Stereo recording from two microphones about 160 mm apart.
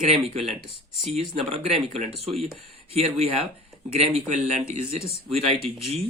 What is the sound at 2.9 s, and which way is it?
Speech, 40° right (ahead or behind).